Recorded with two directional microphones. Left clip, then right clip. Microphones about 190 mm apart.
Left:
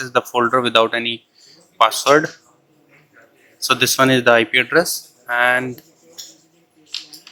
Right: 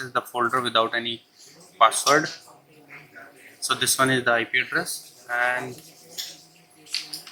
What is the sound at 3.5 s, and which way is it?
Speech, 25° left (ahead or behind).